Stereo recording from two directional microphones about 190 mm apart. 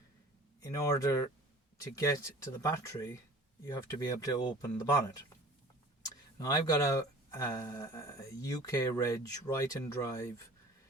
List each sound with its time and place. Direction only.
0.7 s speech: 15° left (ahead or behind)
6.4 s speech: 20° left (ahead or behind)